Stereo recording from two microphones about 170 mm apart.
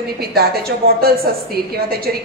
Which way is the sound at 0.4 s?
65° right (ahead or behind).